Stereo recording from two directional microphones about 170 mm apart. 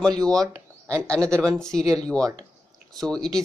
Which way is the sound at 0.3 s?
20° right (ahead or behind).